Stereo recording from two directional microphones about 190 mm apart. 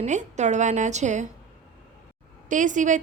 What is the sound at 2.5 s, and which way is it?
Speech, 40° right (ahead or behind).